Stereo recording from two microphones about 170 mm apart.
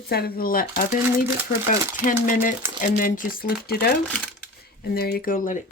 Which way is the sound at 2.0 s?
50° left (ahead or behind).